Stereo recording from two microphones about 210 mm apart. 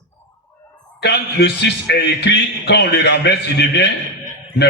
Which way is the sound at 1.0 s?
55° left (ahead or behind).